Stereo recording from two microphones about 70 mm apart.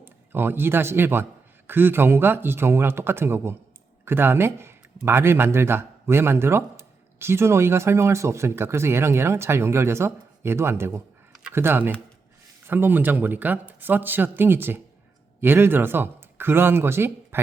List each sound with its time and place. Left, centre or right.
0.0 s speech: right